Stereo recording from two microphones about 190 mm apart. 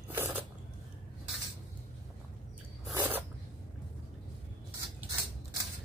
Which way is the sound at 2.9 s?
20° right (ahead or behind).